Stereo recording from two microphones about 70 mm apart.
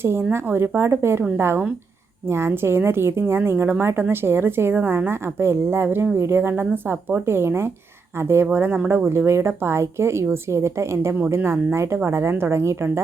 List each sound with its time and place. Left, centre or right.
0.0 s a woman's voice: right